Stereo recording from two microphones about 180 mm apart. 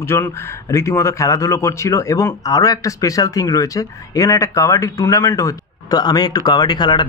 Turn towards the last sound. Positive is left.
turn(degrees=25)  # may be behind; listen again after turning